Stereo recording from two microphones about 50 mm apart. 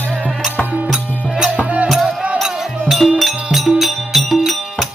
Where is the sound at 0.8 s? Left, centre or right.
Centre.